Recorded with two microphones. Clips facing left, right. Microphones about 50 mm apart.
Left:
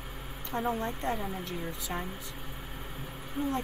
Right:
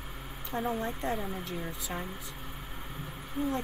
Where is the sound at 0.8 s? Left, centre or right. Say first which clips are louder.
Even; centre.